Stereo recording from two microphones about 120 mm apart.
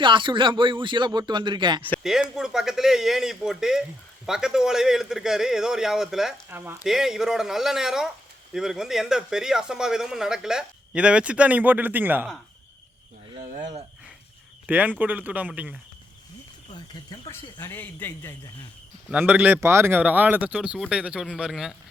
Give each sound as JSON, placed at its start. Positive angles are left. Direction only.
{"t": 0.0, "sound": "speech", "side_deg": -45}
{"t": 2.0, "sound": "speech", "side_deg": -5}
{"t": 6.5, "sound": "speech", "side_deg": -15}
{"t": 6.8, "sound": "speech", "side_deg": -5}
{"t": 14.7, "sound": "speech", "side_deg": -15}
{"t": 16.7, "sound": "speech", "side_deg": 35}
{"t": 17.6, "sound": "a man's voice", "side_deg": 15}
{"t": 19.1, "sound": "speech", "side_deg": -10}